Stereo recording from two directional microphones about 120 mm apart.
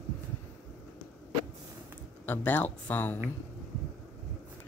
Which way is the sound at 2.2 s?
15° left (ahead or behind).